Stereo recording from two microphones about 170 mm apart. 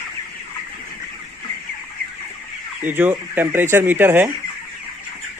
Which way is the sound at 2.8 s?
10° right (ahead or behind).